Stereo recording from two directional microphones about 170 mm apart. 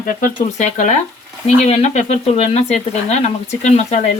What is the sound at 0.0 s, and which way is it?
Speech, 55° left (ahead or behind).